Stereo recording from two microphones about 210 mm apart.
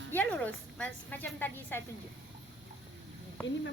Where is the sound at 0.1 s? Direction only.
10° left (ahead or behind).